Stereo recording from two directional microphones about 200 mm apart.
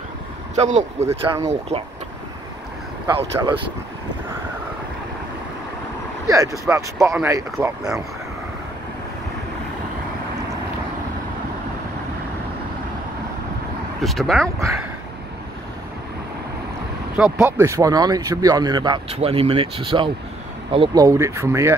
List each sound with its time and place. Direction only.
0.6 s speech: 35° right (ahead or behind)
3.1 s speech: 25° right (ahead or behind)
6.2 s speech: 15° right (ahead or behind)
14.0 s speech: centre (ahead or behind)
17.2 s speech: 10° right (ahead or behind)